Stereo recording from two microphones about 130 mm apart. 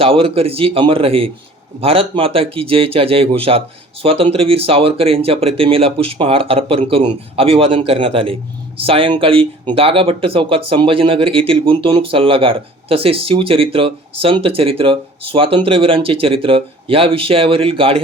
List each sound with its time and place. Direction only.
0.0 s speech: 45° right (ahead or behind)